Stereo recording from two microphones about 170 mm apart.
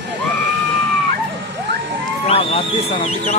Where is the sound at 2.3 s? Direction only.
35° left (ahead or behind).